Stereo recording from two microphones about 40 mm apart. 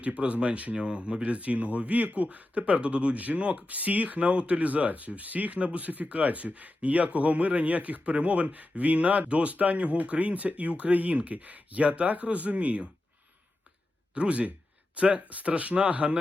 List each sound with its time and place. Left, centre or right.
0.0 s speech: right
14.1 s speech: right